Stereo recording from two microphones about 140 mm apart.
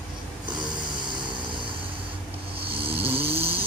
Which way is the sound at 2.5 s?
40° right (ahead or behind).